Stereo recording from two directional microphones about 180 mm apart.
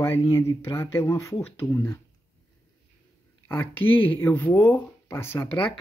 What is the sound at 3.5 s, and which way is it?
Speech, 10° left (ahead or behind).